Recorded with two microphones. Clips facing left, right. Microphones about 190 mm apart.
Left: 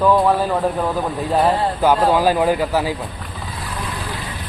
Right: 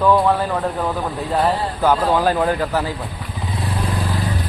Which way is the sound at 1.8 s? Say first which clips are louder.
Left 1 dB; 10° left (ahead or behind).